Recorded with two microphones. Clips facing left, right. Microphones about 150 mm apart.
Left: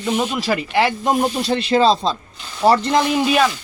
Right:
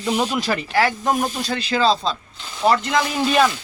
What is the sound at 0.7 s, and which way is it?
Speech, 20° left (ahead or behind).